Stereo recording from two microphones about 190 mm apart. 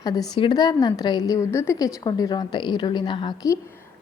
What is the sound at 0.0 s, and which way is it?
A woman's voice, 20° left (ahead or behind).